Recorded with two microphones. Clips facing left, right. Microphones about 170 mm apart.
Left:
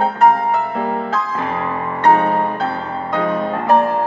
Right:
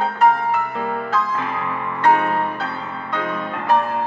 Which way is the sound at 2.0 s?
40° left (ahead or behind).